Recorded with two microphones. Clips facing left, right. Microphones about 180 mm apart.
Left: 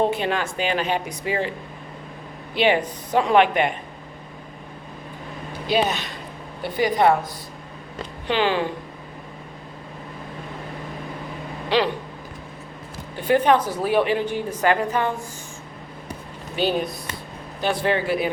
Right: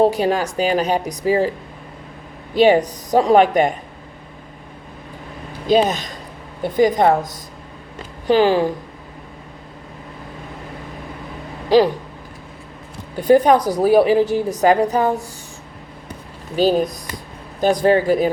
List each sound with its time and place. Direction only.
0.0 s a woman's voice: 40° right (ahead or behind)
2.6 s a woman's voice: 40° right (ahead or behind)
5.7 s a woman's voice: 40° right (ahead or behind)
8.3 s a woman's voice: 40° right (ahead or behind)
11.7 s a woman's voice: 40° right (ahead or behind)
13.1 s a woman's voice: 40° right (ahead or behind)
16.6 s a woman's voice: 40° right (ahead or behind)